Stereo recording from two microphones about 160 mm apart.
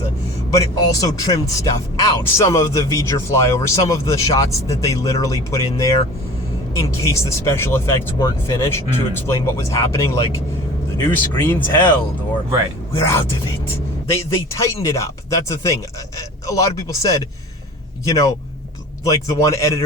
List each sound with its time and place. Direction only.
0.9 s speech: 20° left (ahead or behind)
13.1 s speech: 15° left (ahead or behind)